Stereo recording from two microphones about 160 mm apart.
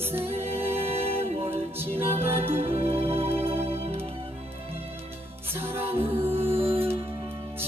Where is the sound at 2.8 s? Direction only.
40° right (ahead or behind).